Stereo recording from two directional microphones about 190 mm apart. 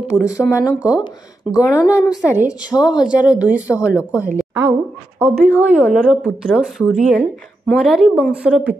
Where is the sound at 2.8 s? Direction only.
5° right (ahead or behind).